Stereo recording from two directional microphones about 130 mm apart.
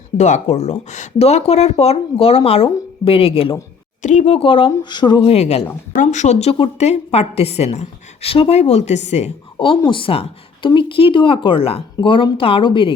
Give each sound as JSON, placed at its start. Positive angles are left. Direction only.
{"t": 0.2, "sound": "speech", "side_deg": 65}
{"t": 4.0, "sound": "speech", "side_deg": 60}
{"t": 5.9, "sound": "a woman's voice", "side_deg": 80}
{"t": 9.6, "sound": "a woman's voice", "side_deg": 40}